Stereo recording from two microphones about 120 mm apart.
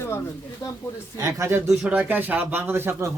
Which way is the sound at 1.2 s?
25° right (ahead or behind).